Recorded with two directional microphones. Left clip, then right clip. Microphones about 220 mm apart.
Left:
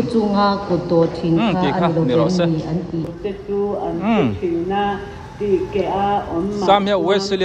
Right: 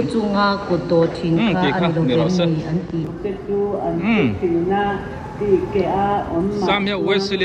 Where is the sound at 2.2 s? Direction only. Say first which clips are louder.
Left 1 dB; 5° left (ahead or behind).